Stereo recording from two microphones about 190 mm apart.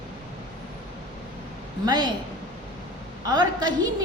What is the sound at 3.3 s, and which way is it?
Speech, 20° right (ahead or behind).